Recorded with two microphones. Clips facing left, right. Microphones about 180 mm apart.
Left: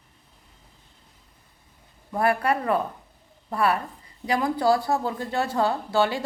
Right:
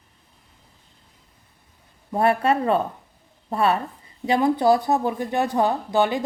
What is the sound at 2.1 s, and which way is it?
A woman's voice, 25° right (ahead or behind).